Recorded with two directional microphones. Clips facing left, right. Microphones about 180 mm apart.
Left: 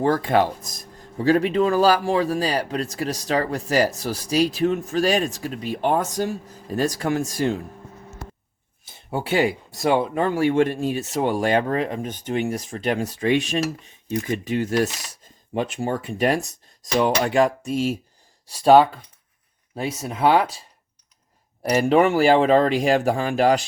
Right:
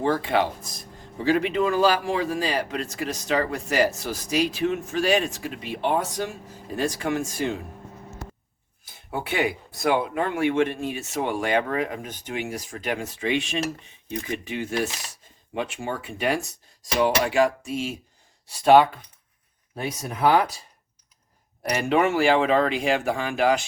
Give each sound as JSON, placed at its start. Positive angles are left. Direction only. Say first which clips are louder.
{"t": 0.0, "sound": "speech", "louder": "left 3 dB", "side_deg": 40}
{"t": 8.8, "sound": "a sound", "louder": "left 3 dB", "side_deg": 30}
{"t": 10.0, "sound": "speech", "louder": "left 4 dB", "side_deg": 30}
{"t": 17.6, "sound": "speech", "louder": "left 6 dB", "side_deg": 40}
{"t": 21.6, "sound": "speech", "louder": "left 5 dB", "side_deg": 35}